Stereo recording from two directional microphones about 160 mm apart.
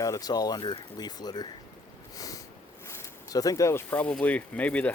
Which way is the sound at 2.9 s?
20° left (ahead or behind).